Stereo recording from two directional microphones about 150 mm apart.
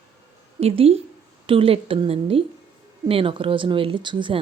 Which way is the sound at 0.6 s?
40° right (ahead or behind).